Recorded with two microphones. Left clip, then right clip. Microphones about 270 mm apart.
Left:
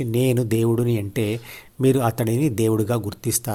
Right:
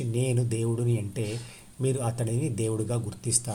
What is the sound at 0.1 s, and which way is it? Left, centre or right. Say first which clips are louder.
Speech: left 9 dB; left.